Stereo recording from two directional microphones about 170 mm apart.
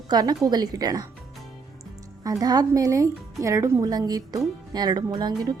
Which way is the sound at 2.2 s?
20° right (ahead or behind).